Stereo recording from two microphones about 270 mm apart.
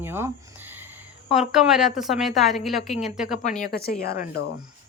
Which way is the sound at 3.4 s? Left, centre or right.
Left.